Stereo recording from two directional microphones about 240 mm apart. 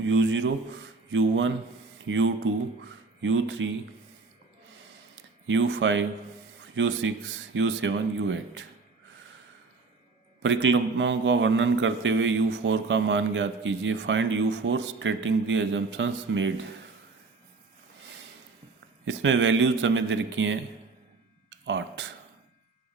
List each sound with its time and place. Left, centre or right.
0.0 s a man's voice: right
5.5 s a man's voice: right
10.4 s a man's voice: right
19.0 s a man's voice: right
21.6 s speech: right